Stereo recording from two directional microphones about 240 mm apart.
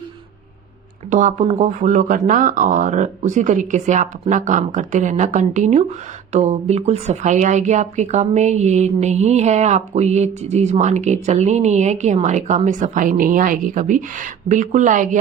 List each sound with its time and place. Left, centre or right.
1.1 s a woman's voice: right